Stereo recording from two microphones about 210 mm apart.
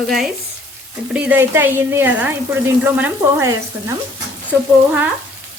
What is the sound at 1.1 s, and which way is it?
A woman's voice, 10° right (ahead or behind).